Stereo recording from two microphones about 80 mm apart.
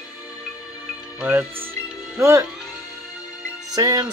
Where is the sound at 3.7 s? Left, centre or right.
Right.